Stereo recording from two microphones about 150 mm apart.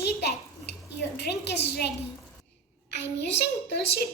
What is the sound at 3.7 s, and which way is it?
Speech, 90° left.